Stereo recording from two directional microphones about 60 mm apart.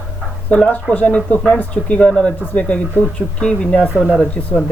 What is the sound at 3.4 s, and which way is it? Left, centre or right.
Speech, centre.